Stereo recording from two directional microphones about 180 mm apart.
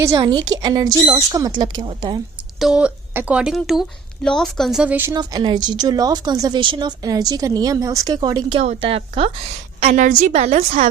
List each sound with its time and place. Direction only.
0.0 s a woman's voice: 20° right (ahead or behind)
2.6 s speech: 5° right (ahead or behind)
5.1 s a woman's voice: 25° right (ahead or behind); by 10.8 s 40° right (ahead or behind)